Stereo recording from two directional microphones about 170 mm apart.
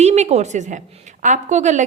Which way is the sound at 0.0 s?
40° right (ahead or behind).